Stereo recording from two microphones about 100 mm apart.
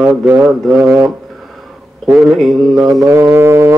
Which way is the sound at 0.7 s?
20° right (ahead or behind).